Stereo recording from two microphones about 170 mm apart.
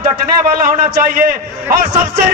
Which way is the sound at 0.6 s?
60° right (ahead or behind).